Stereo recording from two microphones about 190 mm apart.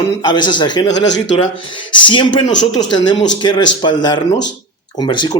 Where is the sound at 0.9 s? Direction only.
70° left (ahead or behind).